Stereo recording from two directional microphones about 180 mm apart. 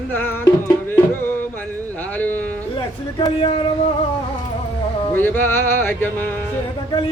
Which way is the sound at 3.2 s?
30° left (ahead or behind).